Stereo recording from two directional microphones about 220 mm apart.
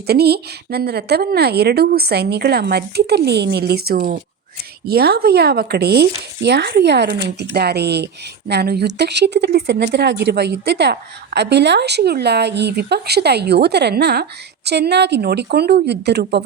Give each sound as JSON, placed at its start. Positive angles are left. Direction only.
{"t": 0.1, "sound": "speech", "side_deg": -45}